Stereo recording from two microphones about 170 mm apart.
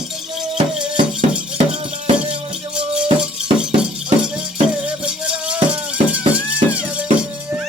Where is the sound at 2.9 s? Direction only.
5° right (ahead or behind).